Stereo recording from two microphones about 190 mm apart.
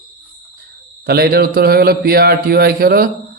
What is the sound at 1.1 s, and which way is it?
A man's voice, 55° right (ahead or behind).